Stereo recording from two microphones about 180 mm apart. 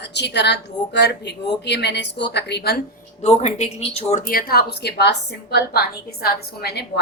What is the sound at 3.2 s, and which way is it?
A woman's voice, 40° left (ahead or behind).